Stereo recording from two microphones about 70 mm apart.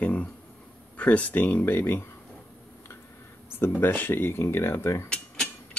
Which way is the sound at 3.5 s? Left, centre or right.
Left.